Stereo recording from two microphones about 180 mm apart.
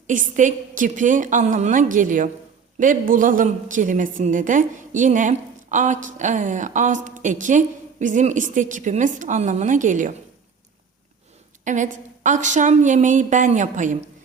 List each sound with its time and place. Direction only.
0.1 s a woman's voice: 45° right (ahead or behind)
11.6 s a woman's voice: 45° right (ahead or behind)